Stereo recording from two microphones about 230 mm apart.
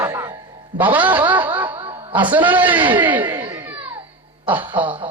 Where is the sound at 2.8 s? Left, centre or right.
Right.